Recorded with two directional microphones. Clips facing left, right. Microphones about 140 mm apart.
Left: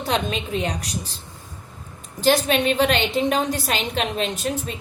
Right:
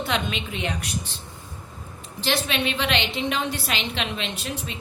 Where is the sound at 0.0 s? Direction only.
40° left (ahead or behind).